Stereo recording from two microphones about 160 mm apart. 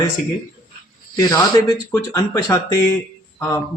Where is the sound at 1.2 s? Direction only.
25° left (ahead or behind).